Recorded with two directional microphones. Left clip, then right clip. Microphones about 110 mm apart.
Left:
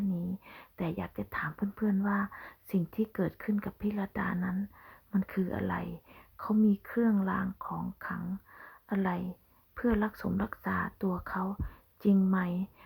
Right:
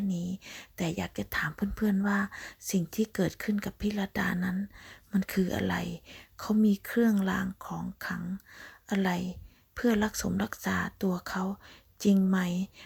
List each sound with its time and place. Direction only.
0.1 s speech: 25° right (ahead or behind)